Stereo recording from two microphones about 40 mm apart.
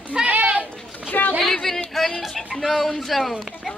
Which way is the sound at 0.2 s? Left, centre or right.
Right.